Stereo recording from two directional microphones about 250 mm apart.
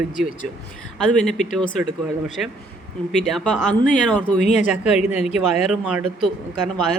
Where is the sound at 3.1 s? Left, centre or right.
Centre.